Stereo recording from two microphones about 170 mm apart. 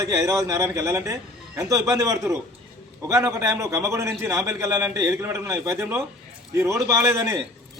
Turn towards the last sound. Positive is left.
turn(degrees=-20)  # may be behind; listen again after turning